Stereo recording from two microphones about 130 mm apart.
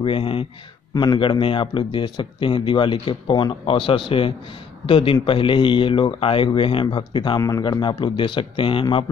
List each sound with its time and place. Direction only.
0.0 s a man's voice: 40° left (ahead or behind)
7.3 s speech: 25° left (ahead or behind)
7.6 s a man's voice: 35° left (ahead or behind)